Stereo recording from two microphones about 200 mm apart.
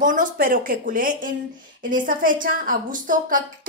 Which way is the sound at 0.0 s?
40° right (ahead or behind).